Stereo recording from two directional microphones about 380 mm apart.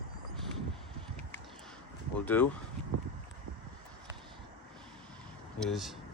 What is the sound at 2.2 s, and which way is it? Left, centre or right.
Speech, centre.